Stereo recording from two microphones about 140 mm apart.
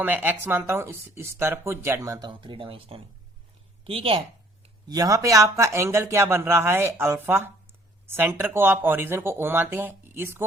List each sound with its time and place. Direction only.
0.0 s a woman's voice: 15° right (ahead or behind); by 4.2 s 40° right (ahead or behind)
4.9 s speech: 25° right (ahead or behind)